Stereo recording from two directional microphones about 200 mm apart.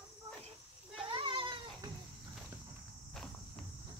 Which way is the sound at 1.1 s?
25° right (ahead or behind).